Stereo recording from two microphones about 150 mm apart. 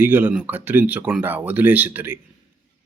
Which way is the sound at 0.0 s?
10° right (ahead or behind).